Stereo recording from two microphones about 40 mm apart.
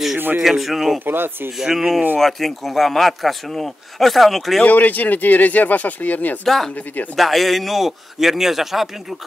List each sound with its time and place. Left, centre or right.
0.4 s speech: centre
1.0 s speech: right
1.6 s speech: centre
2.1 s speech: centre
4.6 s speech: left
6.4 s speech: centre